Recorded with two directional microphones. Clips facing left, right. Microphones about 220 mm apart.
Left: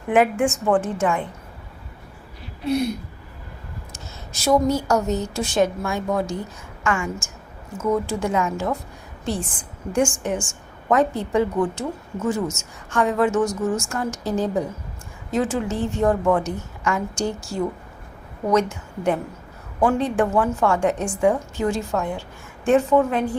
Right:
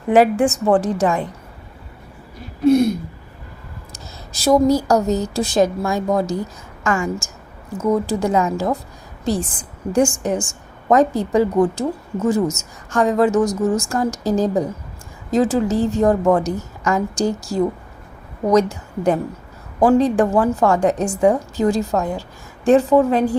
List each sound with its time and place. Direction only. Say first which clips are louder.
0.1 s a woman's voice: right 4 dB; 35° right (ahead or behind)
3.9 s a woman's voice: right 1 dB; 35° right (ahead or behind)